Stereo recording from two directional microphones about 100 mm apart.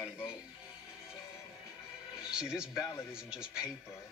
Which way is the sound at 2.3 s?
10° right (ahead or behind).